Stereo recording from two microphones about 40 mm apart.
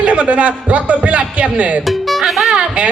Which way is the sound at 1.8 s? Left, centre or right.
Centre.